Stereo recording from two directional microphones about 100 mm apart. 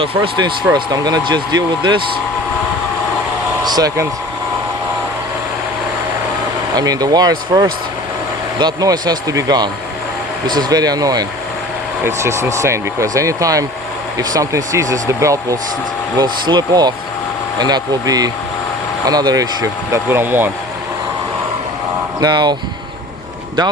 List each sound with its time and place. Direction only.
0.0 s speech: 60° right (ahead or behind)
3.6 s speech: 40° right (ahead or behind)
6.7 s speech: 40° right (ahead or behind)
12.0 s speech: 30° right (ahead or behind)
16.1 s speech: 45° right (ahead or behind)
20.1 s speech: 20° right (ahead or behind)
22.2 s speech: 45° right (ahead or behind)